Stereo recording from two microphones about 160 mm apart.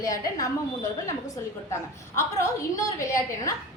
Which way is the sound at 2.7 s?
20° left (ahead or behind).